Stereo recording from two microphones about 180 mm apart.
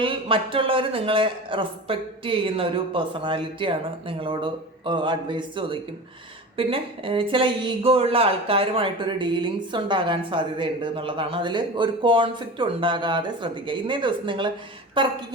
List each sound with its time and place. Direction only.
0.0 s speech: 30° right (ahead or behind)